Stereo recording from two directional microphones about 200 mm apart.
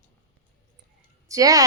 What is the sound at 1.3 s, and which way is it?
Speech, 15° right (ahead or behind).